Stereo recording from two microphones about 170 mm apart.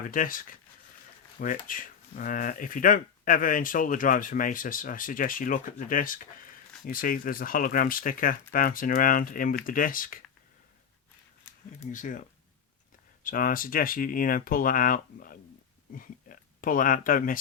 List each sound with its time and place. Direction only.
0.1 s speech: 55° left (ahead or behind)
11.9 s speech: 50° left (ahead or behind)
13.2 s speech: 55° left (ahead or behind)